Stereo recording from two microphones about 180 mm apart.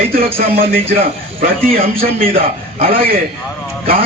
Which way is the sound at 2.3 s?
30° right (ahead or behind).